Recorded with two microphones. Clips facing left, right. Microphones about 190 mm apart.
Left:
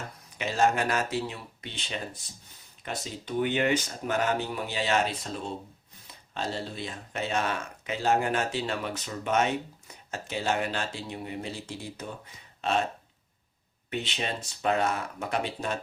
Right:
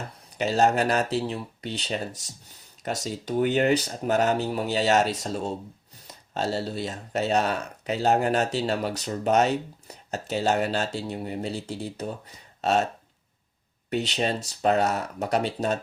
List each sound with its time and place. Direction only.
0.0 s speech: 35° right (ahead or behind)
13.9 s speech: 40° right (ahead or behind)